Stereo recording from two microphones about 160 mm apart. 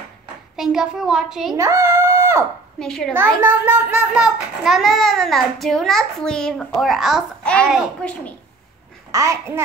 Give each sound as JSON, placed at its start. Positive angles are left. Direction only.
{"t": 0.6, "sound": "a child's voice", "side_deg": -5}
{"t": 1.5, "sound": "a child's voice", "side_deg": -20}
{"t": 2.8, "sound": "a child's voice", "side_deg": 5}
{"t": 3.3, "sound": "a child's voice", "side_deg": -15}
{"t": 9.1, "sound": "a child's voice", "side_deg": -20}